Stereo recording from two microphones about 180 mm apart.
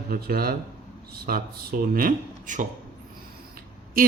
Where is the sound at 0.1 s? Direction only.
55° right (ahead or behind).